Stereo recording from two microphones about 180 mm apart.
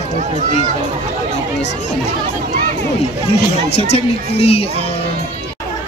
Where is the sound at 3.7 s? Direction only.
35° left (ahead or behind).